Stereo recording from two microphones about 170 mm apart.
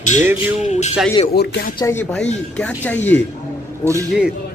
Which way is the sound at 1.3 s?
75° left (ahead or behind).